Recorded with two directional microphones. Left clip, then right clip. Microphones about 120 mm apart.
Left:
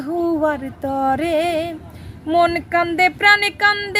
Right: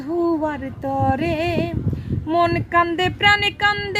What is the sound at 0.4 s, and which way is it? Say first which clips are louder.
Speech: left 4 dB; 30° left (ahead or behind).